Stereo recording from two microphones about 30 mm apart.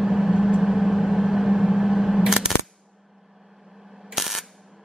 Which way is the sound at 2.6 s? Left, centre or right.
Centre.